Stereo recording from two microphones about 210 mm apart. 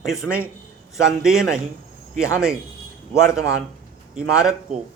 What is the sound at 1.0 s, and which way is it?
Speech, centre (ahead or behind).